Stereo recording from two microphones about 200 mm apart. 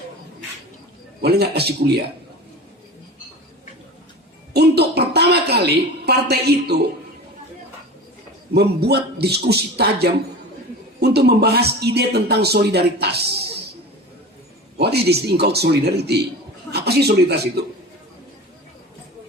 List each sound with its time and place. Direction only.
1.2 s a man's voice: 55° right (ahead or behind)
4.5 s a sound: 55° right (ahead or behind)
8.5 s a man's voice: 55° right (ahead or behind)
14.8 s a man's voice: 55° right (ahead or behind)